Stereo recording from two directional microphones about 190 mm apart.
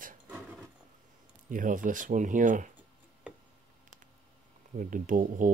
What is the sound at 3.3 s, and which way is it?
Tick, 5° right (ahead or behind).